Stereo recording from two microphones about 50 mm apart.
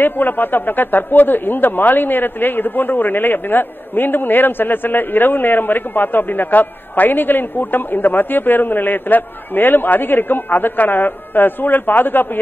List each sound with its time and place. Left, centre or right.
0.0 s speech: left